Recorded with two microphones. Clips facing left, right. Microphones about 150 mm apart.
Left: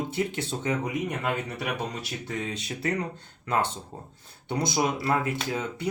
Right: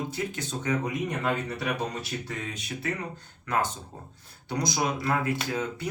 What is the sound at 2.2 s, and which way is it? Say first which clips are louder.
Speech: left 3 dB; 30° left (ahead or behind).